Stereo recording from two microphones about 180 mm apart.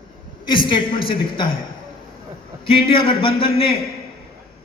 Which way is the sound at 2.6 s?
30° left (ahead or behind).